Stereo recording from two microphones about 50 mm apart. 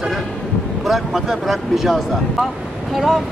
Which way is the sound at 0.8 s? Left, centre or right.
Centre.